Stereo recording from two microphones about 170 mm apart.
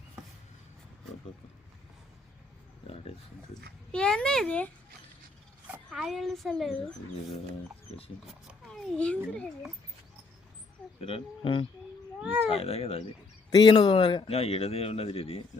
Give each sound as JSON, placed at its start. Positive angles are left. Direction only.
{"t": 2.8, "sound": "speech", "side_deg": 35}
{"t": 3.9, "sound": "a child's voice", "side_deg": 5}
{"t": 5.7, "sound": "a child's voice", "side_deg": -5}
{"t": 8.3, "sound": "speech", "side_deg": 0}
{"t": 11.0, "sound": "speech", "side_deg": 30}
{"t": 12.2, "sound": "speech", "side_deg": -10}
{"t": 12.5, "sound": "speech", "side_deg": 35}